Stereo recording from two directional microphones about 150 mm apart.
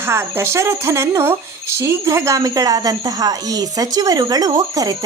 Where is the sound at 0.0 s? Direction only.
15° right (ahead or behind).